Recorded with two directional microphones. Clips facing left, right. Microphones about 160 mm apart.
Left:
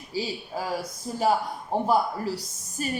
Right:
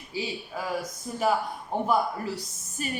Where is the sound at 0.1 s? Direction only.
35° left (ahead or behind).